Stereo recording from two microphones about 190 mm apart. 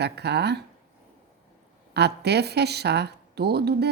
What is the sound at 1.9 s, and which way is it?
A woman's voice, 60° right (ahead or behind).